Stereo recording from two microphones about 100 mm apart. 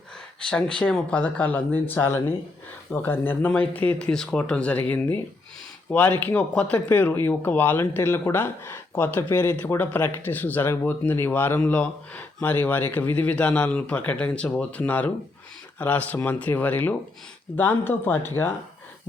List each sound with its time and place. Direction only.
0.8 s speech: 10° left (ahead or behind)